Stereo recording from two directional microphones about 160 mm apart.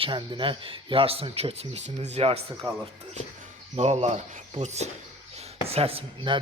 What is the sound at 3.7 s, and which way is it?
Speech, 45° right (ahead or behind).